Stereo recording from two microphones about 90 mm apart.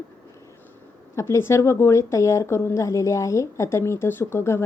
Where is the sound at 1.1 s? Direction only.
30° left (ahead or behind).